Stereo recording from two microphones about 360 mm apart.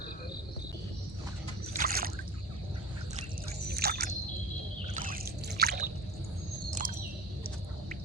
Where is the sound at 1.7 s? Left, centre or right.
Right.